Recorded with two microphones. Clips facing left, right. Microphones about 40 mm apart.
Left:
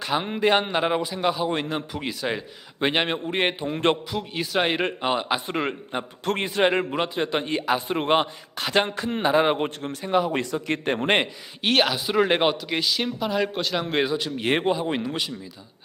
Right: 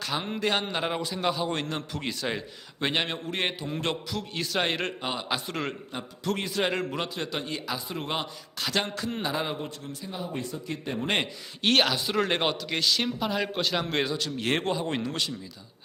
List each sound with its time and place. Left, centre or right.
0.0 s speech: left
2.8 s a man's voice: left
4.1 s a man's voice: centre; by 9.6 s left
9.6 s a man's voice: left
11.6 s speech: centre